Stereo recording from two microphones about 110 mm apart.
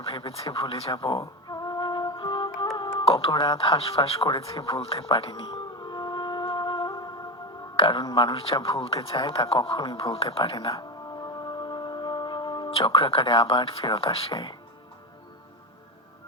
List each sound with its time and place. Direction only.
0.0 s speech: 55° left (ahead or behind)
1.2 s music: 35° left (ahead or behind)
2.7 s a sound: 45° left (ahead or behind)
3.3 s a sound: 40° left (ahead or behind)
7.8 s speech: 45° left (ahead or behind)
10.8 s music: 40° left (ahead or behind)
12.7 s speech: 50° left (ahead or behind)